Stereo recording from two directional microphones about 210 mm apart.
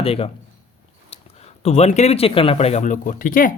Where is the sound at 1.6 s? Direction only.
30° left (ahead or behind).